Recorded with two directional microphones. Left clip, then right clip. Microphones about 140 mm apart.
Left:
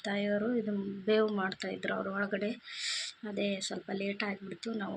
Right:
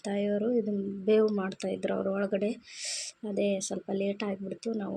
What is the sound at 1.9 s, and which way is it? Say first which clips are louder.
Speech: right 6 dB; 20° right (ahead or behind).